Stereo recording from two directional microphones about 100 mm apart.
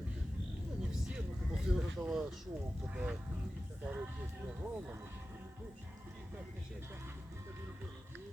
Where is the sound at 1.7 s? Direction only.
5° right (ahead or behind).